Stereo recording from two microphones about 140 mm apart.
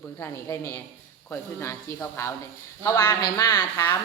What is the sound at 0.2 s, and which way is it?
Speech, 20° left (ahead or behind).